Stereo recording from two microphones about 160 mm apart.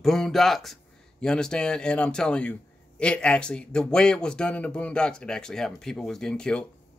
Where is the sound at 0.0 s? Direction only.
Centre (ahead or behind).